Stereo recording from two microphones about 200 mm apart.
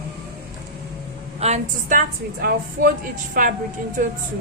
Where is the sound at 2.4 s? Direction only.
45° right (ahead or behind).